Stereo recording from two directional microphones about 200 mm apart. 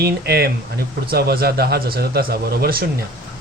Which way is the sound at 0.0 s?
50° right (ahead or behind).